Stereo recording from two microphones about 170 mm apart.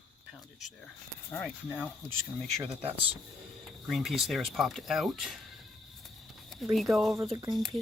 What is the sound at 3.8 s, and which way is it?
Speech, centre (ahead or behind).